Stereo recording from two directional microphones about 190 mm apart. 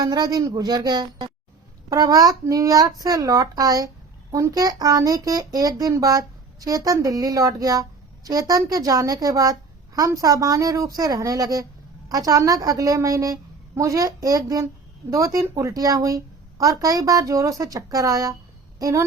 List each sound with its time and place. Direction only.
0.0 s a child's voice: 20° right (ahead or behind)